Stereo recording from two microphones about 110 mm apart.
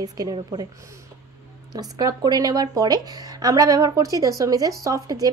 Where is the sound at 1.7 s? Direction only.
35° right (ahead or behind).